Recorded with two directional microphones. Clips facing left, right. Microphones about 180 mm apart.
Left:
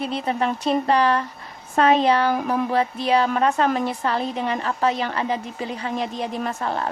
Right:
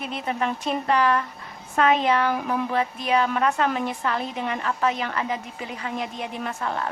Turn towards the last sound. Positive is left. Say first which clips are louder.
# left 3 dB
turn(degrees=35)  # may be behind; listen again after turning